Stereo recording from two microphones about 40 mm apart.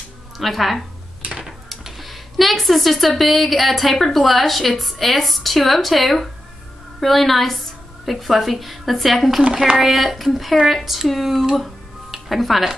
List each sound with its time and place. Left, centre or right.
0.4 s a woman's voice: centre
11.5 s music: centre